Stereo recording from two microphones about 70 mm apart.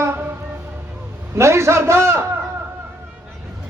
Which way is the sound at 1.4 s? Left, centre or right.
Right.